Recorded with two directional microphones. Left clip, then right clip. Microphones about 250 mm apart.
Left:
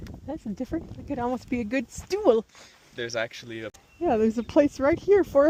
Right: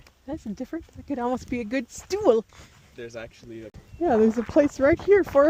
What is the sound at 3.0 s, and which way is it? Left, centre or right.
Speech, left.